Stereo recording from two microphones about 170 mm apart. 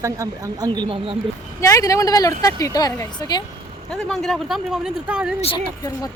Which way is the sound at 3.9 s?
Centre (ahead or behind).